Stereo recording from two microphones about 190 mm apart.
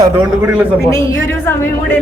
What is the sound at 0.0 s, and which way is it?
Speech, 10° right (ahead or behind).